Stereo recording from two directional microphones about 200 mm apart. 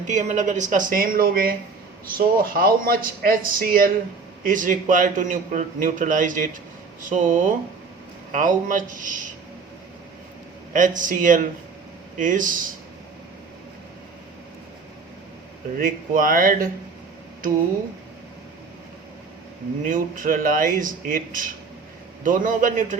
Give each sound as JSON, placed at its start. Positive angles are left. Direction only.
{"t": 0.1, "sound": "a man's voice", "side_deg": -40}
{"t": 10.7, "sound": "a man's voice", "side_deg": -40}
{"t": 15.8, "sound": "speech", "side_deg": -45}
{"t": 19.9, "sound": "a man's voice", "side_deg": -45}